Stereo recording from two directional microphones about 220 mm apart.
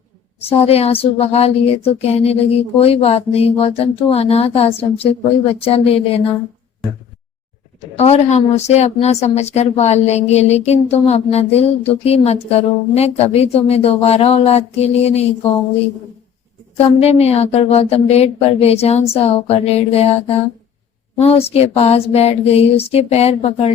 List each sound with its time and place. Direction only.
0.4 s a woman's voice: 25° left (ahead or behind)
7.9 s a woman's voice: 30° left (ahead or behind)
17.0 s a woman's voice: 30° left (ahead or behind)